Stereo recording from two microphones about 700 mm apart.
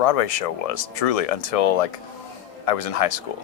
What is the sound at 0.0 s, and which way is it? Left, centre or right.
Speech, left.